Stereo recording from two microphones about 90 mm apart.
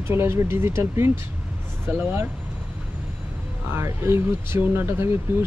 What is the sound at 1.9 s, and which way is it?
Speech, 20° right (ahead or behind).